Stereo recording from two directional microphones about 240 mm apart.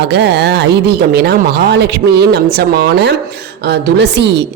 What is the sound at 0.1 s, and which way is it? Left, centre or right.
Speech, right.